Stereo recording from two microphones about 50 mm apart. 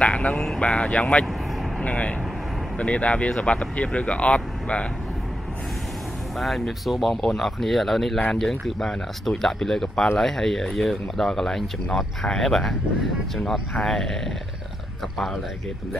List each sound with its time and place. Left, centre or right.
0.0 s speech: left
0.3 s speech: centre
0.8 s speech: left
6.3 s speech: centre